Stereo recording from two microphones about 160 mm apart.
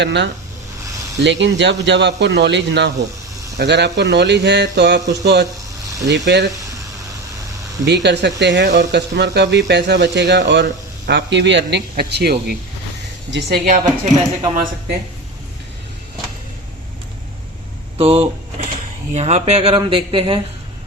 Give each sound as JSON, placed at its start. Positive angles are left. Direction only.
{"t": 0.0, "sound": "speech", "side_deg": -90}
{"t": 5.8, "sound": "spray", "side_deg": -20}
{"t": 6.1, "sound": "speech", "side_deg": -90}
{"t": 8.0, "sound": "speech", "side_deg": -90}
{"t": 13.7, "sound": "speech", "side_deg": -50}
{"t": 17.9, "sound": "speech", "side_deg": -35}